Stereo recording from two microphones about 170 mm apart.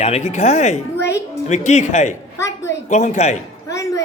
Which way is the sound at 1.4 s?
45° left (ahead or behind).